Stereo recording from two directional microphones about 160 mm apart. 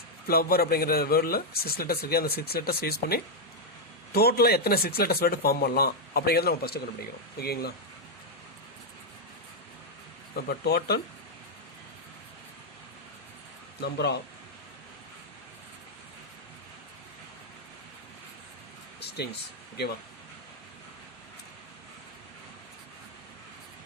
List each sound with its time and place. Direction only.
0.3 s speech: 70° left (ahead or behind)
10.3 s speech: 80° left
13.8 s speech: 90° left
18.9 s a sound: 90° left